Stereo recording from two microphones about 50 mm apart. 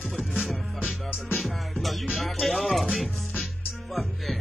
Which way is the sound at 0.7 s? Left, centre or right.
Right.